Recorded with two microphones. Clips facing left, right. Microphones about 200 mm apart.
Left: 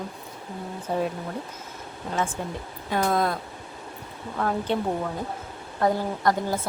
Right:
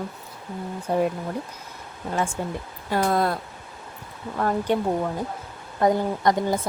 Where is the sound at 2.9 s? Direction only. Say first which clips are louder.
Right 2 dB; 5° right (ahead or behind).